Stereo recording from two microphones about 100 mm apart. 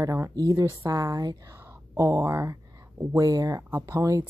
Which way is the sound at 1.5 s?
30° right (ahead or behind).